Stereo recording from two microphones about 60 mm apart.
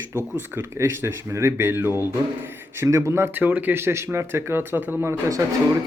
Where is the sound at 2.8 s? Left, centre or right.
Right.